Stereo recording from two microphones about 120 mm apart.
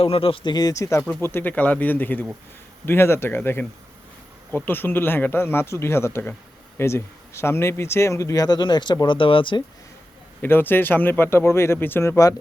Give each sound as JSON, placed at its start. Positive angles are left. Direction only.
{"t": 0.0, "sound": "speech", "side_deg": 50}
{"t": 10.4, "sound": "speech", "side_deg": 15}